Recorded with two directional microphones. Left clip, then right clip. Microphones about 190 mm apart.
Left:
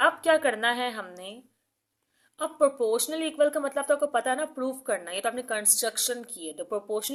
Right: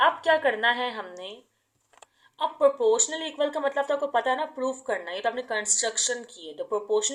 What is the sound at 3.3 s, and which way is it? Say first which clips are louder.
Speech: left 1 dB; 35° left (ahead or behind).